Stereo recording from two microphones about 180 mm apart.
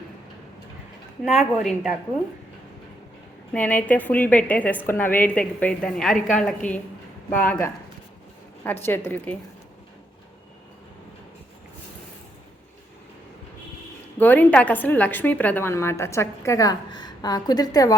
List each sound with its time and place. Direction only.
1.2 s a woman's voice: centre (ahead or behind)
3.5 s a woman's voice: 10° left (ahead or behind)
6.6 s a woman's voice: 45° left (ahead or behind)
7.3 s a woman's voice: 10° left (ahead or behind)
14.2 s a woman's voice: 10° left (ahead or behind)